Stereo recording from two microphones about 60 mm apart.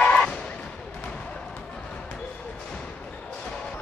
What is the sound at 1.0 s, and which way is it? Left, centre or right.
Basketball bounce, centre.